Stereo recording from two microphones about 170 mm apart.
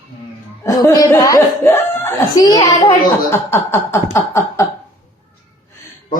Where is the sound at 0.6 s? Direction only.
15° left (ahead or behind).